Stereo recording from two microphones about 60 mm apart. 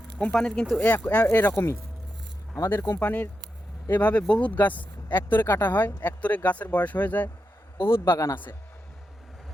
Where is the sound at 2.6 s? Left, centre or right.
Left.